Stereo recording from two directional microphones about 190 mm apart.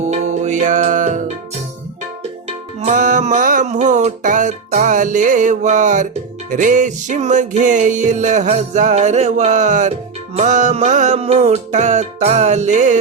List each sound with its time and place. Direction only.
0.0 s music: 35° right (ahead or behind)
2.8 s music: 40° right (ahead or behind)